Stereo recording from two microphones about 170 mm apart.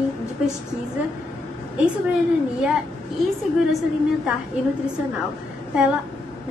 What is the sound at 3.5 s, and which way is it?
Speech, 5° right (ahead or behind).